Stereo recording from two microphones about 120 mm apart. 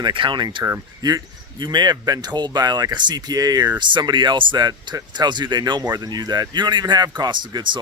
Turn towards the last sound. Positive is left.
turn(degrees=-40)  # may be behind; listen again after turning